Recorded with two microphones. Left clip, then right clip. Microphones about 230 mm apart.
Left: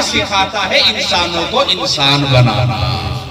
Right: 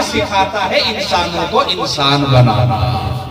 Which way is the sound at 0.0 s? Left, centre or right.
Centre.